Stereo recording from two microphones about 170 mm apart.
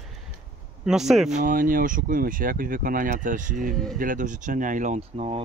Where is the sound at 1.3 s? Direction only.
55° right (ahead or behind).